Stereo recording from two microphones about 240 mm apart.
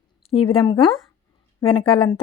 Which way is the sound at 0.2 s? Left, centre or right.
Left.